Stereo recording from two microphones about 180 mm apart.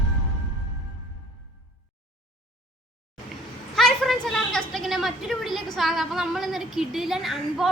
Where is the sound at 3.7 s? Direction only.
Centre (ahead or behind).